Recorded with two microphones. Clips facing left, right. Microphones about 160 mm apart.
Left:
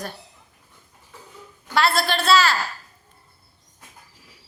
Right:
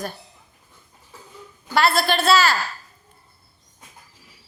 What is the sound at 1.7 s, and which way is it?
Speech, centre (ahead or behind).